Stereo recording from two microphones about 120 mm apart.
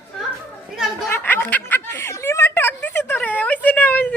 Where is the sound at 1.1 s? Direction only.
15° left (ahead or behind).